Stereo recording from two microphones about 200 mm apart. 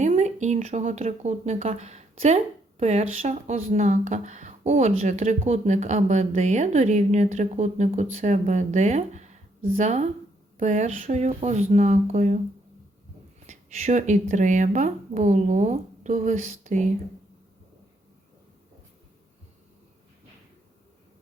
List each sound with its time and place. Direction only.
0.0 s speech: 35° right (ahead or behind)
13.5 s speech: 35° right (ahead or behind)